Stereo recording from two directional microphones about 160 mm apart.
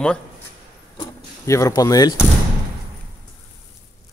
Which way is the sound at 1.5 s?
20° left (ahead or behind).